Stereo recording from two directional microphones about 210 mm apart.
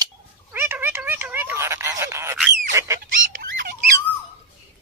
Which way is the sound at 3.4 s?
45° right (ahead or behind).